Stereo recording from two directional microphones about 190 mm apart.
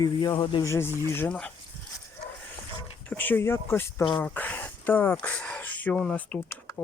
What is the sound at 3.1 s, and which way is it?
Speech, 10° left (ahead or behind).